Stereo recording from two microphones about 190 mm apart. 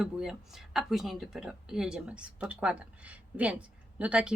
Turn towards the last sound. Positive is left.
turn(degrees=-5)  # may be behind; listen again after turning